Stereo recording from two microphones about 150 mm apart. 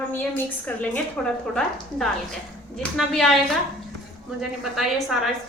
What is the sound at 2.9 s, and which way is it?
Speech, centre (ahead or behind).